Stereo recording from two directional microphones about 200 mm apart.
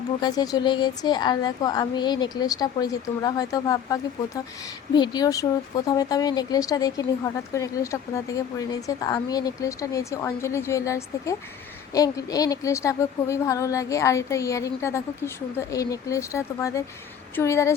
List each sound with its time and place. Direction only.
0.2 s a woman's voice: 20° left (ahead or behind)